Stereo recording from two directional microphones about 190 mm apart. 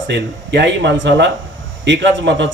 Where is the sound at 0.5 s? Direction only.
65° right (ahead or behind).